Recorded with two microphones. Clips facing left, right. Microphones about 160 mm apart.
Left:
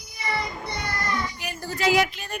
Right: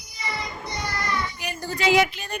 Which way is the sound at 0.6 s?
60° left (ahead or behind).